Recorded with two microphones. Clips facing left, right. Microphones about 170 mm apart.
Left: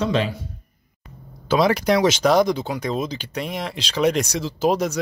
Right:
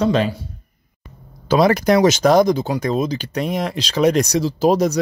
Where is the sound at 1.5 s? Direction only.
45° right (ahead or behind).